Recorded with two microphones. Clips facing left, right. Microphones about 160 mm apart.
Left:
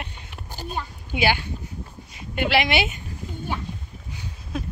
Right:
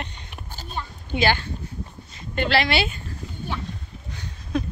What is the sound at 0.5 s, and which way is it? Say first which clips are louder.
A child's voice: left 3 dB; 10° left (ahead or behind).